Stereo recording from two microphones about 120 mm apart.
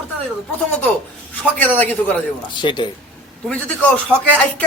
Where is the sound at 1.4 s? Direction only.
15° left (ahead or behind).